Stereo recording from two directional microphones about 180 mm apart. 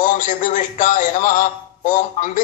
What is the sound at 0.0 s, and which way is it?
A man's voice, 45° left (ahead or behind).